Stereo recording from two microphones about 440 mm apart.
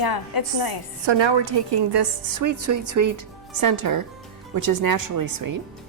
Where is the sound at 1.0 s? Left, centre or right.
Right.